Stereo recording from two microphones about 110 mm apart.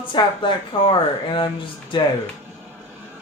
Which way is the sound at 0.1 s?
50° left (ahead or behind).